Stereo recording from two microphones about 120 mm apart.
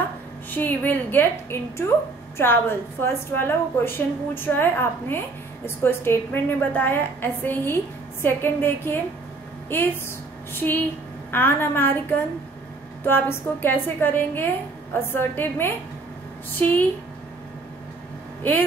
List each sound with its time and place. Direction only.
0.5 s a woman's voice: 15° left (ahead or behind)
11.3 s a woman's voice: 20° left (ahead or behind)